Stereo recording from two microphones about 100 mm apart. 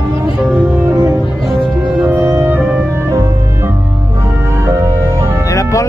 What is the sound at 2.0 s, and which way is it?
Music, 20° right (ahead or behind).